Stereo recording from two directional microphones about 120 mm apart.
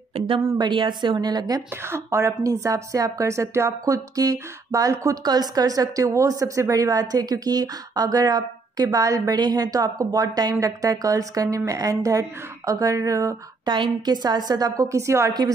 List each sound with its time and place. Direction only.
0.6 s a woman's voice: 40° right (ahead or behind)
13.7 s a woman's voice: 40° right (ahead or behind); by 15.3 s 25° right (ahead or behind)